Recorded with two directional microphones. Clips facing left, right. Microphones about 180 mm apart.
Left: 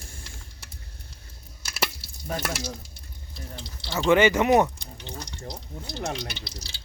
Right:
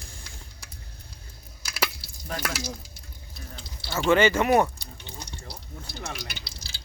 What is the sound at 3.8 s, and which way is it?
Speech, 5° right (ahead or behind).